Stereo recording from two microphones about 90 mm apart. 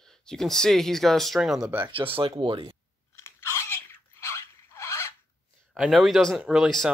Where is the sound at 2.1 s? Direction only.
90° right.